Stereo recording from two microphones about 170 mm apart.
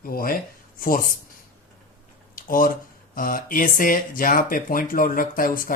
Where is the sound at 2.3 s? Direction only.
55° left (ahead or behind).